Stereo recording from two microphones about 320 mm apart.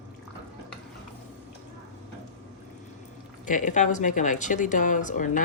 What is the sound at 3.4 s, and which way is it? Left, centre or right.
Speech, left.